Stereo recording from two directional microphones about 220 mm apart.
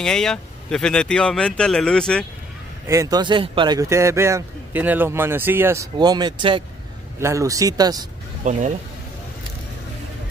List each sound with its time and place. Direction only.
0.0 s speech: 5° left (ahead or behind)
2.9 s speech: 15° right (ahead or behind)
8.5 s speech: 35° right (ahead or behind)